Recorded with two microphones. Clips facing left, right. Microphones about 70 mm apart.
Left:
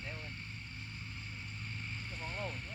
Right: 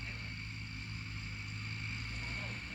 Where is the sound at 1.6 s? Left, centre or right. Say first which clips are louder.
Even; right.